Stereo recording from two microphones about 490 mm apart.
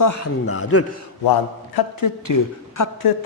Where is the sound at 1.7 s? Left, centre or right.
Left.